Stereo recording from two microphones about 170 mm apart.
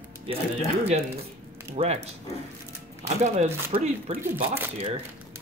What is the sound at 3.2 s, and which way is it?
Speech, 40° right (ahead or behind).